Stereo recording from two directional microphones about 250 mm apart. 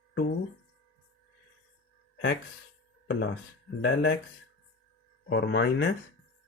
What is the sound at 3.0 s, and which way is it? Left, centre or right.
Speech, left.